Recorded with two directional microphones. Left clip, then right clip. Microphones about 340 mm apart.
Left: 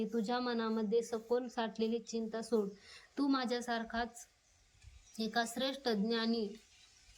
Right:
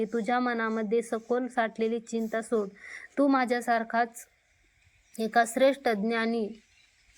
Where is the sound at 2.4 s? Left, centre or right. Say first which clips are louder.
Right 6 dB; centre.